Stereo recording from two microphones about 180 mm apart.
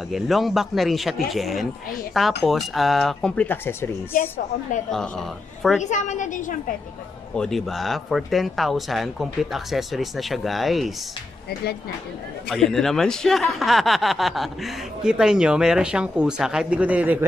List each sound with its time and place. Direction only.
0.1 s speech: centre (ahead or behind)
4.9 s speech: 5° left (ahead or behind)
5.8 s a woman's voice: 45° left (ahead or behind)
7.3 s speech: centre (ahead or behind)
12.4 s speech: 5° left (ahead or behind)